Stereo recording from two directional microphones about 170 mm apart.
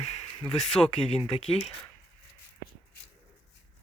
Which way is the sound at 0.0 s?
40° left (ahead or behind).